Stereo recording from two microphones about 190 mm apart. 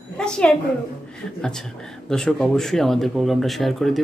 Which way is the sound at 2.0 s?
5° left (ahead or behind).